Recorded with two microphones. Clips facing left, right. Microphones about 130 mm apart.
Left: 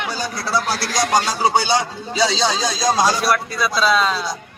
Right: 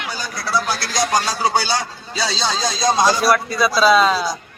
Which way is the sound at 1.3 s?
20° left (ahead or behind).